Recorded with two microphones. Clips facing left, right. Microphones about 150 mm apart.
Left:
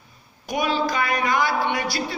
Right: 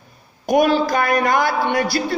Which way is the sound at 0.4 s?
50° right (ahead or behind).